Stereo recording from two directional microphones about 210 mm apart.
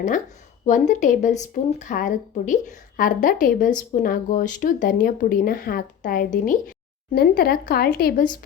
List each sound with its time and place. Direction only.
0.7 s speech: 35° left (ahead or behind)